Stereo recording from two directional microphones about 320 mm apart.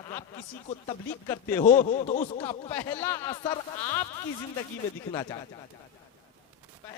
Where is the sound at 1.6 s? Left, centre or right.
Left.